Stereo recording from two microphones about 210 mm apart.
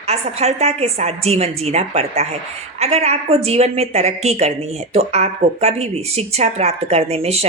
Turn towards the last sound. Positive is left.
turn(degrees=-30)  # may be behind; listen again after turning